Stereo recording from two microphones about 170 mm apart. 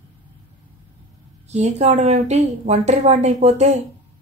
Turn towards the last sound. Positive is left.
turn(degrees=-40)  # may be behind; listen again after turning